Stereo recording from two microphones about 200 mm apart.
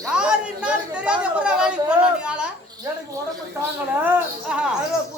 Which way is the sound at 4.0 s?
10° right (ahead or behind).